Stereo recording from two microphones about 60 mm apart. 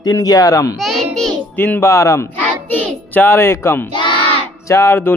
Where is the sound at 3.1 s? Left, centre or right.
Left.